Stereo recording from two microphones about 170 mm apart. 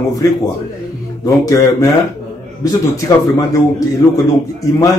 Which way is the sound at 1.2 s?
20° left (ahead or behind).